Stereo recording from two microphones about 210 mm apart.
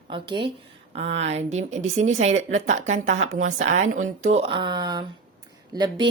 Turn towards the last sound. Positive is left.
turn(degrees=-20)  # may be behind; listen again after turning